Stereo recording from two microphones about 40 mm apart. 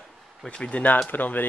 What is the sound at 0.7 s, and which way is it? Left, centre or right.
Speech, left.